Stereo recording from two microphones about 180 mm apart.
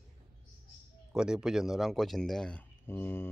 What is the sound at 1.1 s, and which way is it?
Speech, 5° right (ahead or behind).